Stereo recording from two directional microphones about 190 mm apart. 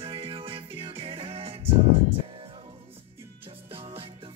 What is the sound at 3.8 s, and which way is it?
Music, 30° right (ahead or behind).